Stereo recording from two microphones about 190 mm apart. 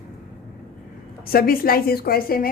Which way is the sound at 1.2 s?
50° left (ahead or behind).